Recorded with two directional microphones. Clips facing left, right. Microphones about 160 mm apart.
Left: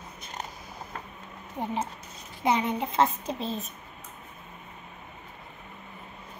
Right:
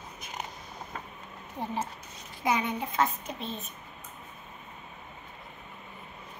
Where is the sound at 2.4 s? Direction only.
25° left (ahead or behind).